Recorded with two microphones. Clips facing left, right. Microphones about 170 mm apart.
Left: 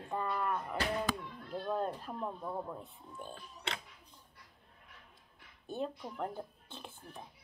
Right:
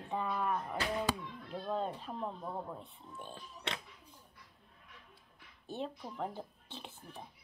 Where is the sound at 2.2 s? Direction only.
10° right (ahead or behind).